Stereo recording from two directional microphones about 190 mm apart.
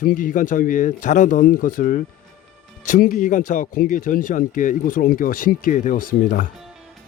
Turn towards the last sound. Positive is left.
turn(degrees=45)  # may be behind; listen again after turning